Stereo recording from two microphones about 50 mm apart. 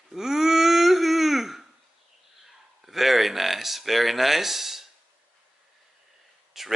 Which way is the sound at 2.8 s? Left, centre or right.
Centre.